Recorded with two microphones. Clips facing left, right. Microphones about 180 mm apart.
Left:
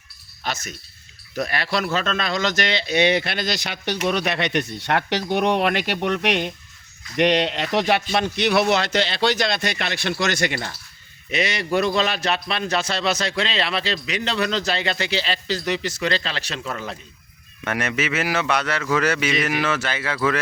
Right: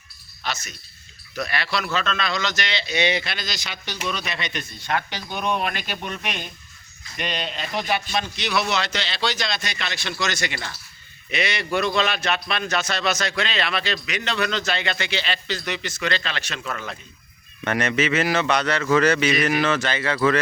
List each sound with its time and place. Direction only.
0.4 s speech: 50° left (ahead or behind); by 8.0 s 70° left (ahead or behind)
8.1 s speech: 55° left (ahead or behind)
11.3 s a man's voice: 40° left (ahead or behind)
17.6 s a man's voice: 5° left (ahead or behind)